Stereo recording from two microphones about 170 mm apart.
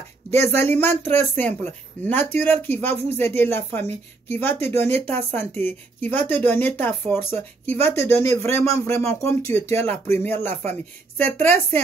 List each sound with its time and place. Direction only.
0.3 s speech: 15° left (ahead or behind)